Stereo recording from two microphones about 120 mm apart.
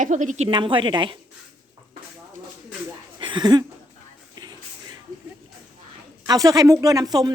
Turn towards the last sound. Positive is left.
turn(degrees=-35)  # may be behind; listen again after turning